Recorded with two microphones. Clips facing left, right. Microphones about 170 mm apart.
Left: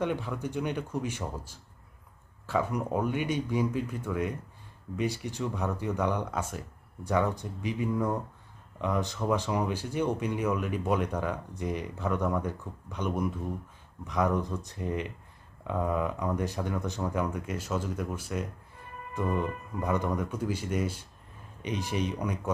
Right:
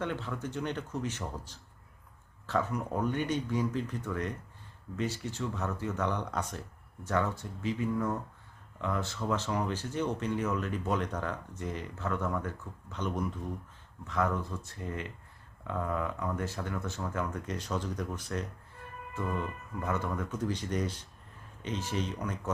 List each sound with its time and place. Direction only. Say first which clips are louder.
0.0 s speech: left 4 dB; 15° left (ahead or behind)